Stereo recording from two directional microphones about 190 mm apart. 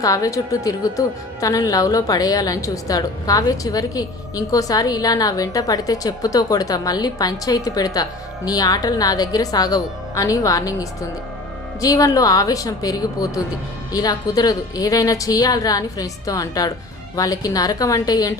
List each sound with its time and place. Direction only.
0.0 s a woman's voice: 20° left (ahead or behind)